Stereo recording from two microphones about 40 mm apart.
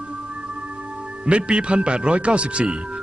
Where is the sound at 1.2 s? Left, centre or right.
Right.